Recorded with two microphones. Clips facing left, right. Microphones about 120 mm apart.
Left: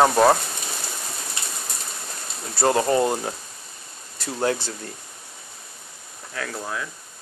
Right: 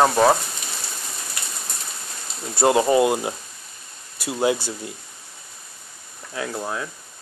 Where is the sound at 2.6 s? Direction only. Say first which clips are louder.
Right 3 dB; 15° right (ahead or behind).